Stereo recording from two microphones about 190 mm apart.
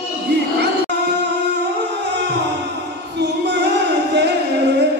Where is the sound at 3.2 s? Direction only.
65° right (ahead or behind).